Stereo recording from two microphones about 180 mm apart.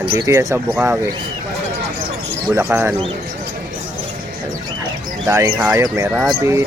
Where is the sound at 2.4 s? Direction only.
15° right (ahead or behind).